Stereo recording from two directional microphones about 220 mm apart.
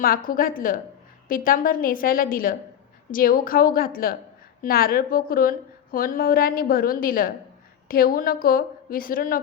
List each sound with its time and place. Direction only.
0.0 s a woman's voice: 40° left (ahead or behind)